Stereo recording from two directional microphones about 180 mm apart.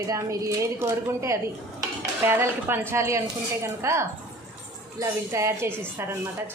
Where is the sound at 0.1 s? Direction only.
15° right (ahead or behind).